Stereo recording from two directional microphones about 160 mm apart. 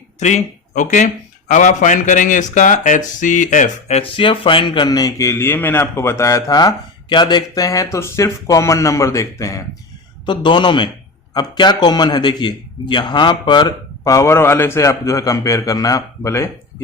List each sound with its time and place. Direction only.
0.2 s speech: 45° left (ahead or behind); by 16.5 s 20° left (ahead or behind)